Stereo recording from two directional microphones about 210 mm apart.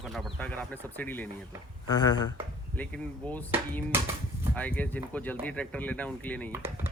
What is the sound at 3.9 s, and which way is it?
Speech, 10° right (ahead or behind).